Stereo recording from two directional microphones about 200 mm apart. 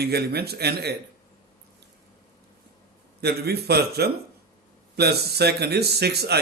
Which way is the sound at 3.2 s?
55° right (ahead or behind).